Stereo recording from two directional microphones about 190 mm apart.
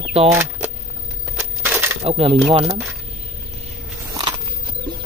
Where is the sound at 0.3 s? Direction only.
15° right (ahead or behind).